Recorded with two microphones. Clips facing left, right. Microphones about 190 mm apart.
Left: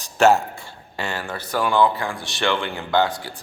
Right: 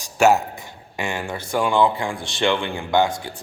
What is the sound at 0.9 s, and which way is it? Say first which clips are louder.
Speech: right 2 dB; 10° right (ahead or behind).